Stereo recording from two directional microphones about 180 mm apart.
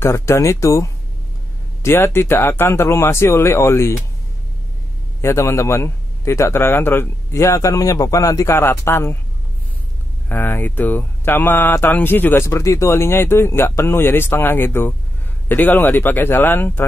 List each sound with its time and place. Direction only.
0.0 s speech: 15° left (ahead or behind)
5.2 s speech: 15° left (ahead or behind)
10.2 s speech: 10° left (ahead or behind)